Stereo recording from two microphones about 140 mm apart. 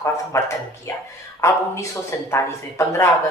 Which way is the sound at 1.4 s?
20° left (ahead or behind).